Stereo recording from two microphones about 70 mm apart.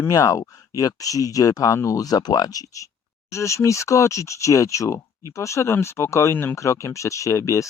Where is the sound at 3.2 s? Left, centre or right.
Left.